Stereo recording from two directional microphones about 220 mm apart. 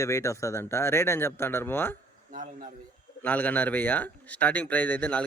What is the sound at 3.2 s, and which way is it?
Speech, 5° left (ahead or behind).